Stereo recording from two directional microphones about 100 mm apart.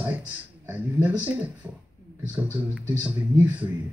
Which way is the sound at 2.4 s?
15° right (ahead or behind).